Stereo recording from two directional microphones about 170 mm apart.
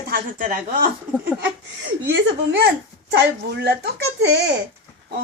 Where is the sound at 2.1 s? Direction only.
85° right.